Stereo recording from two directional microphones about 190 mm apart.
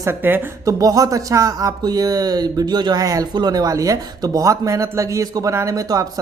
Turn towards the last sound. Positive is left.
turn(degrees=-20)  # may be behind; listen again after turning